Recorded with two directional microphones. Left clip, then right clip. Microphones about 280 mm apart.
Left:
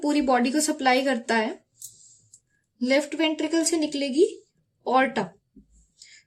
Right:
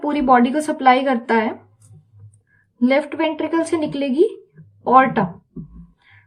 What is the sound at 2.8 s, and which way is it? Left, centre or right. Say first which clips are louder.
Speech: right 5 dB; left.